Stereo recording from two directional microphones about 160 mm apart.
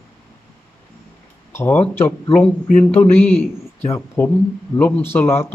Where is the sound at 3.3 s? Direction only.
40° left (ahead or behind).